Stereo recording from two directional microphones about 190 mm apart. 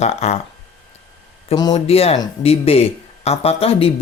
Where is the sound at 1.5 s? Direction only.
20° left (ahead or behind).